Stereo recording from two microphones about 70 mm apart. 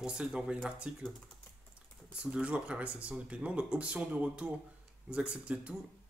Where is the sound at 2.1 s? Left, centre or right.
Centre.